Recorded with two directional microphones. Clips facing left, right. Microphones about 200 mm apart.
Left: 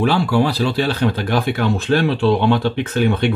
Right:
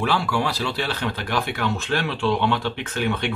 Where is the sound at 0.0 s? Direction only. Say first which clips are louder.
Left 7 dB; 35° left (ahead or behind).